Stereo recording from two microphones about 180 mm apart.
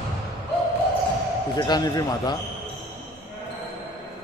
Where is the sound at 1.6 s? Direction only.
20° left (ahead or behind).